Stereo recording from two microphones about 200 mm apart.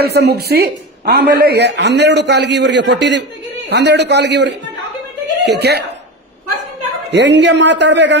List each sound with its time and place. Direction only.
0.0 s a man's voice: 55° right (ahead or behind)
7.1 s a man's voice: 60° right (ahead or behind)